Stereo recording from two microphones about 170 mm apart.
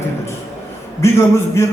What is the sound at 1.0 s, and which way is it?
Speech, 15° left (ahead or behind).